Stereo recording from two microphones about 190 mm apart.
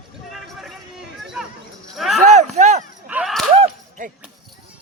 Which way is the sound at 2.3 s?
35° right (ahead or behind).